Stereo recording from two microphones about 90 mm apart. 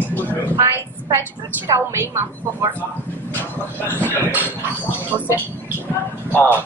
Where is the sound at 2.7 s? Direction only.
20° left (ahead or behind).